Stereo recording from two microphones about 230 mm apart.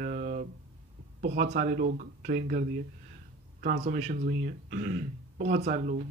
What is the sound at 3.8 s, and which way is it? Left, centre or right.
Speech, right.